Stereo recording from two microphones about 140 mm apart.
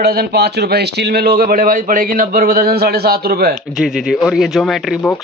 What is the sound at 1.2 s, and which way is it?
A man's voice, 90° right.